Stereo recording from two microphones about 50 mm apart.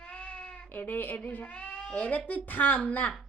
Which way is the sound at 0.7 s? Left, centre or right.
Left.